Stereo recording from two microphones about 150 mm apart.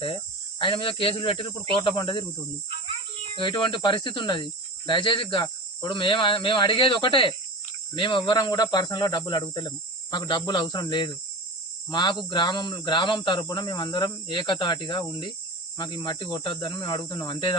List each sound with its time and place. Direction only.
0.6 s speech: 35° left (ahead or behind)
3.3 s speech: 35° left (ahead or behind)